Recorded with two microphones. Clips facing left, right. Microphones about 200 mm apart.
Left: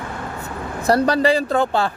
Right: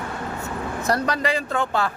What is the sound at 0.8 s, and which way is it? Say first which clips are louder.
Speech: left 8 dB; 30° left (ahead or behind).